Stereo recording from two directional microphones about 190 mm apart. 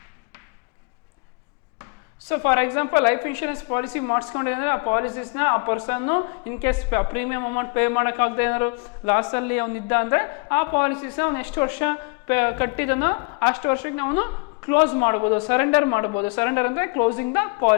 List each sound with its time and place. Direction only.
1.8 s speech: 15° left (ahead or behind)
13.2 s a sound: 25° left (ahead or behind)
13.5 s speech: 15° left (ahead or behind)